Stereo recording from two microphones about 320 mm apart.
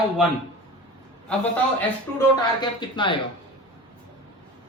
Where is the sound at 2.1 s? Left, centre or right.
Centre.